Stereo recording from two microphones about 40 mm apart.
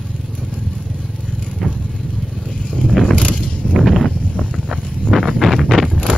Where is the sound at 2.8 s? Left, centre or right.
Left.